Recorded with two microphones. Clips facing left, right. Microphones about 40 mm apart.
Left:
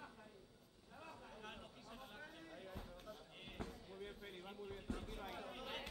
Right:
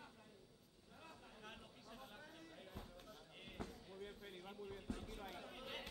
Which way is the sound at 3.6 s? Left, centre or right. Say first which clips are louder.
Left 2 dB; centre.